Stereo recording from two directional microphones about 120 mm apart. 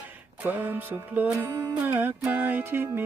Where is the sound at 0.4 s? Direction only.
15° right (ahead or behind).